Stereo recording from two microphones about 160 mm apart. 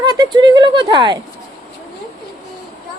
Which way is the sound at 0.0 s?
25° right (ahead or behind).